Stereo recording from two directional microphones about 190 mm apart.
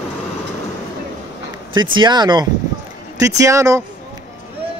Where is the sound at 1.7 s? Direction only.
25° right (ahead or behind).